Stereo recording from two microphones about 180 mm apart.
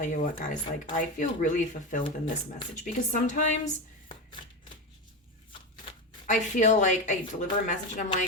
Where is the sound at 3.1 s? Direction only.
40° left (ahead or behind).